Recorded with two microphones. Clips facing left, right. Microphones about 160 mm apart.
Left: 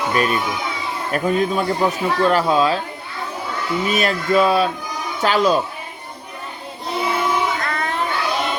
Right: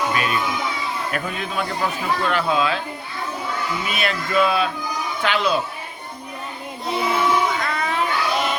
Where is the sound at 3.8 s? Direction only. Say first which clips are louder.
Left 6 dB; 40° left (ahead or behind).